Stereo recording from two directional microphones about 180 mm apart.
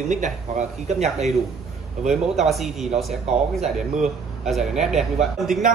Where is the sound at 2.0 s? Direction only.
Centre (ahead or behind).